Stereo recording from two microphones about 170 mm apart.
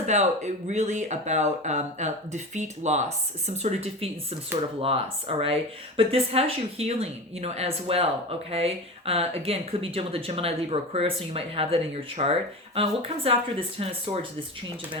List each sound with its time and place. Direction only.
0.1 s a woman's voice: 40° right (ahead or behind)